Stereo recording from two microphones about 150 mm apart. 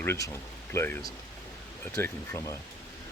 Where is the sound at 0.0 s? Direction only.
15° left (ahead or behind).